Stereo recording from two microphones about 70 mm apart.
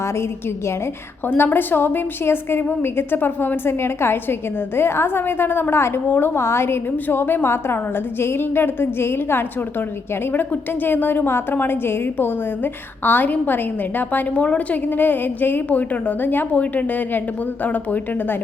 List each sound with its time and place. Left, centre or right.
1.4 s a woman's voice: left